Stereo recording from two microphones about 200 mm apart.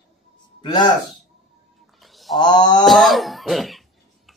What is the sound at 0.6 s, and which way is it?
Speech, 20° left (ahead or behind).